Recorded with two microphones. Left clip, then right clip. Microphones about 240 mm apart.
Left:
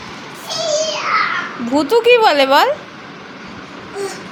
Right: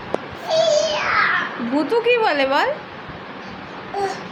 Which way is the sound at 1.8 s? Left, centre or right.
Left.